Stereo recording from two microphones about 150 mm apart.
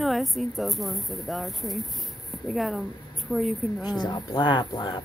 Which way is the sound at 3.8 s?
25° left (ahead or behind).